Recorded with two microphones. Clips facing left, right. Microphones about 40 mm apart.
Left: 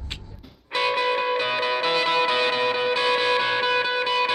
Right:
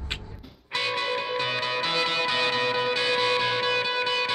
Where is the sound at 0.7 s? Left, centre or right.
Centre.